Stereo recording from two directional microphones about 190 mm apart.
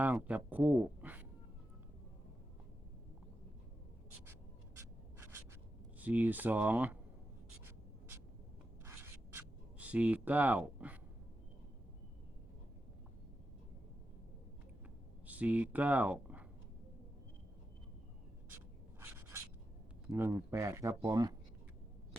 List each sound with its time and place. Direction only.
0.0 s speech: 10° right (ahead or behind)
6.0 s speech: 10° right (ahead or behind)
7.6 s writing: 10° right (ahead or behind)
15.3 s speech: 10° right (ahead or behind)
18.5 s writing: 10° right (ahead or behind)
20.1 s speech: 15° right (ahead or behind)